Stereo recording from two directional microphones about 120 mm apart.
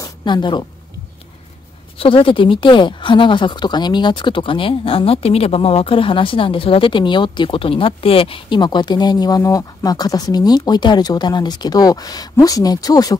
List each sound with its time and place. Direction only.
0.0 s a woman's voice: 40° left (ahead or behind)
2.0 s speech: 45° left (ahead or behind); by 13.2 s 30° left (ahead or behind)